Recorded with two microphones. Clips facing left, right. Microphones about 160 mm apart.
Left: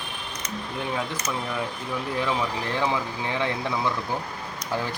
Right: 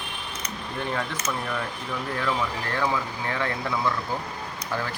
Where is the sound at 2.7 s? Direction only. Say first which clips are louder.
Even; 20° left (ahead or behind).